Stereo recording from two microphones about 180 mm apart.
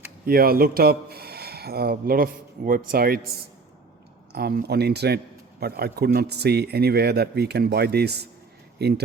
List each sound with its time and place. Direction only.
0.3 s a man's voice: 55° right (ahead or behind)
4.3 s a man's voice: 60° right (ahead or behind)